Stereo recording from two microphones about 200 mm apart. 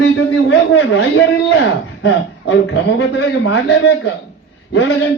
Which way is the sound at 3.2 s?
65° left (ahead or behind).